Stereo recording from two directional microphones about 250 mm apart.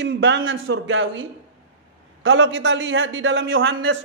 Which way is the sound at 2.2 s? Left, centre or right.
Right.